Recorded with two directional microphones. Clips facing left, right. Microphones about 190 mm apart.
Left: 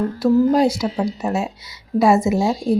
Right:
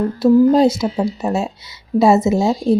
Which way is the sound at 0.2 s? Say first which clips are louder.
Right 4 dB; 25° right (ahead or behind).